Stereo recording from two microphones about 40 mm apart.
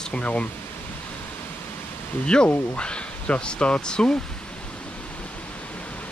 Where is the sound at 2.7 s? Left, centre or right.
Left.